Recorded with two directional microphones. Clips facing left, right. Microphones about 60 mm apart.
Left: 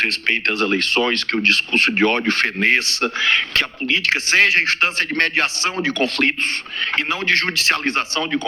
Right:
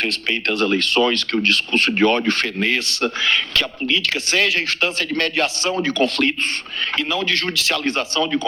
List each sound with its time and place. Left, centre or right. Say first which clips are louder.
0.0 s speech: left 2 dB; left